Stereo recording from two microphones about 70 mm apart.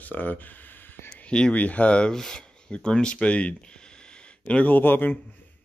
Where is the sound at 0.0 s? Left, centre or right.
Left.